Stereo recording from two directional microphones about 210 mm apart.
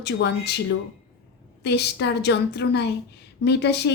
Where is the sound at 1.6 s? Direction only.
55° left (ahead or behind).